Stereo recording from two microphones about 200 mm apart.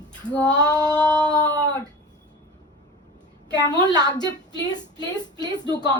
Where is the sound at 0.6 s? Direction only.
5° left (ahead or behind).